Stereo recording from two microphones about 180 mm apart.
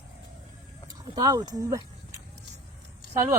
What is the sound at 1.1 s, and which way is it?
Speech, 20° right (ahead or behind).